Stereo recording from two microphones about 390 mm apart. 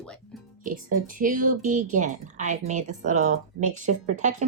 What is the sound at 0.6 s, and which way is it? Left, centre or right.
A woman's voice, right.